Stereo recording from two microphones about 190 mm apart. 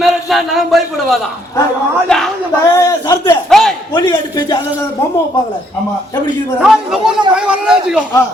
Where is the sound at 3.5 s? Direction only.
Centre (ahead or behind).